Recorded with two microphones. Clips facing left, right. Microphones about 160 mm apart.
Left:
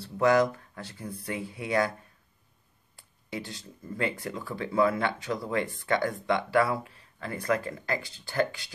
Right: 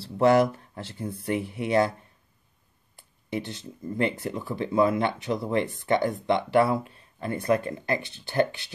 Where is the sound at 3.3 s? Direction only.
25° right (ahead or behind).